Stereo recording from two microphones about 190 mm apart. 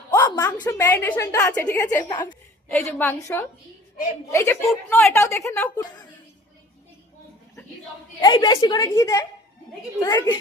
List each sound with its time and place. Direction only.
0.1 s a sound: 20° left (ahead or behind)
0.8 s a woman's voice: 10° left (ahead or behind)
2.6 s a woman's voice: 5° left (ahead or behind)
8.2 s a woman's voice: 25° left (ahead or behind)